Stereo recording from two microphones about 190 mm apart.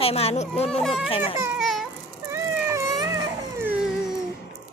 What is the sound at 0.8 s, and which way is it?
Speech, centre (ahead or behind).